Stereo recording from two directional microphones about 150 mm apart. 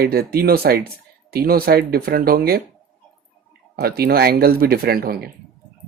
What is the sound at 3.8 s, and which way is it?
Speech, 90° right.